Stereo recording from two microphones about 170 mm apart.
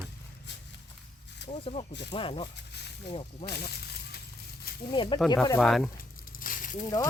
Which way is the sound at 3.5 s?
70° left (ahead or behind).